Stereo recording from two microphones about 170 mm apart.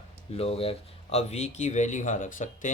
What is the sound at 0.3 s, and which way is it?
Speech, 35° left (ahead or behind).